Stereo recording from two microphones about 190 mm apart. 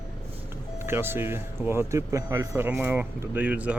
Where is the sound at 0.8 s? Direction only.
10° right (ahead or behind).